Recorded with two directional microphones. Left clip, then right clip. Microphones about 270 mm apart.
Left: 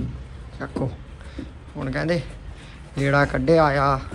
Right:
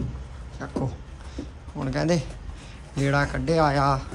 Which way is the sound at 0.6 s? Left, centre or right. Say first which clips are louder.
Left 2 dB; centre.